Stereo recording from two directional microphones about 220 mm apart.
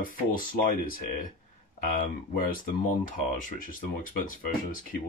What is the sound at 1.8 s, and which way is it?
Speech, 35° left (ahead or behind).